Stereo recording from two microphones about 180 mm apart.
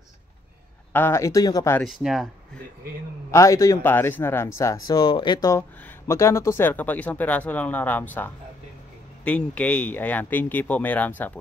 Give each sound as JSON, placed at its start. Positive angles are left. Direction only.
{"t": 0.9, "sound": "speech", "side_deg": 15}
{"t": 1.8, "sound": "speech", "side_deg": 0}
{"t": 3.3, "sound": "speech", "side_deg": 15}